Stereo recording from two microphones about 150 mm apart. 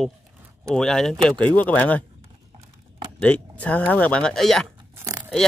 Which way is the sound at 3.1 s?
10° left (ahead or behind).